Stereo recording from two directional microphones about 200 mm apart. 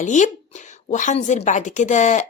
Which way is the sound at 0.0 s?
40° left (ahead or behind).